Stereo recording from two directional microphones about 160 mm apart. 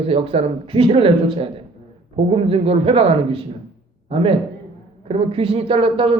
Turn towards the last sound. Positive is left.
turn(degrees=-35)  # may be behind; listen again after turning